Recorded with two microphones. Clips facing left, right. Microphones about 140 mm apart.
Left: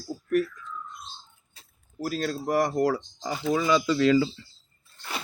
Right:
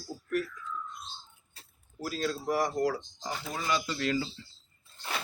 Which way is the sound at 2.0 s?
50° left (ahead or behind).